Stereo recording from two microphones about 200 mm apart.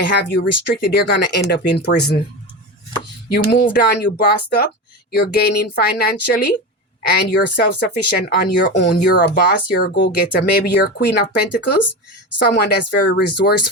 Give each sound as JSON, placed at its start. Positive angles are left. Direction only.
{"t": 0.0, "sound": "speech", "side_deg": 55}
{"t": 3.2, "sound": "speech", "side_deg": 50}